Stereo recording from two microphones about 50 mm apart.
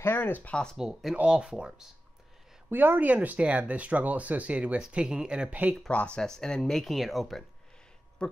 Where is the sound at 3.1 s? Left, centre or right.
Right.